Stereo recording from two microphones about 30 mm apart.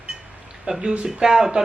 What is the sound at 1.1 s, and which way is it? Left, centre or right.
Speech, centre.